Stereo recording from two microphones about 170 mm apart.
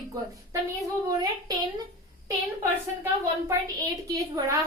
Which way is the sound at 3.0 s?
20° right (ahead or behind).